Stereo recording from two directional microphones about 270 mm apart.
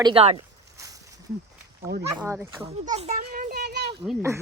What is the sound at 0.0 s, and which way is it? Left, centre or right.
Speech, right.